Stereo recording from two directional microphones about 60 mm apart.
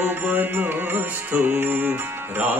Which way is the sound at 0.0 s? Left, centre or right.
Right.